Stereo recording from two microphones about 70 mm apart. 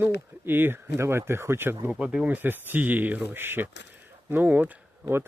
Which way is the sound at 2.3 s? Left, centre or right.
Right.